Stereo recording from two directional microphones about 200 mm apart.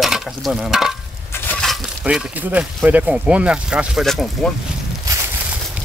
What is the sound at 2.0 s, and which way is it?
Speech, 5° right (ahead or behind).